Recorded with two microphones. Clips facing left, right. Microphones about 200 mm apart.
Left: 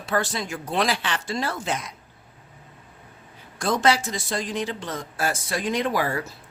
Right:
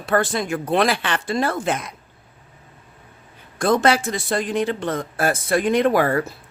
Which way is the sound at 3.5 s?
55° right (ahead or behind).